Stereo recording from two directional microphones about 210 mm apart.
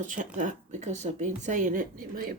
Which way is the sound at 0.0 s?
40° right (ahead or behind).